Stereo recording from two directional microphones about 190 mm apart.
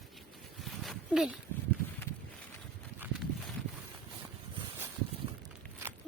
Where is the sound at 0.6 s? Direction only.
Centre (ahead or behind).